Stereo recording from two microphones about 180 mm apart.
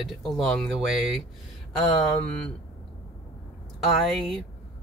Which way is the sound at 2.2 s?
5° left (ahead or behind).